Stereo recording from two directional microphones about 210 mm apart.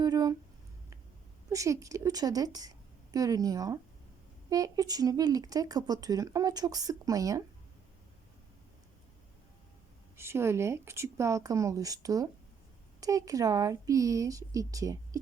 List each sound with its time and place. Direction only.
0.0 s a sound: 15° right (ahead or behind)
1.5 s a woman's voice: 15° right (ahead or behind)
10.2 s speech: 10° right (ahead or behind)